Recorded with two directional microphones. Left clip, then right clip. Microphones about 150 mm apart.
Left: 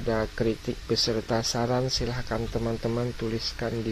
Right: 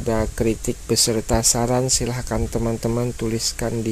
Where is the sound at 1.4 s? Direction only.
55° right (ahead or behind).